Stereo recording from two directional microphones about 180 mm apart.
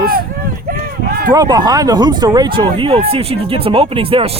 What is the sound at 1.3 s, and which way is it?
Speech, 25° right (ahead or behind).